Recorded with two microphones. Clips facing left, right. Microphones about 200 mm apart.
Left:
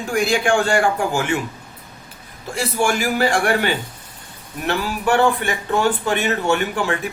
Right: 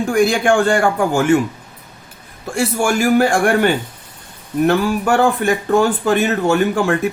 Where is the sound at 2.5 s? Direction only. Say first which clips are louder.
Right 3 dB; 50° right (ahead or behind).